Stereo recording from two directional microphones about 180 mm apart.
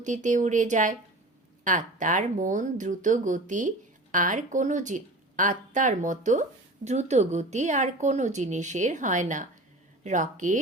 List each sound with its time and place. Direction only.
0.0 s speech: 45° right (ahead or behind)